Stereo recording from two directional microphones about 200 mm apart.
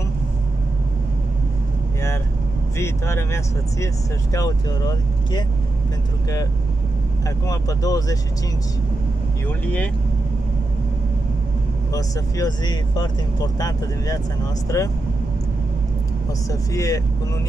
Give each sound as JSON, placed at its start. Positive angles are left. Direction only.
{"t": 2.8, "sound": "speech", "side_deg": 15}
{"t": 7.2, "sound": "speech", "side_deg": 15}
{"t": 11.9, "sound": "speech", "side_deg": 20}
{"t": 16.4, "sound": "speech", "side_deg": 15}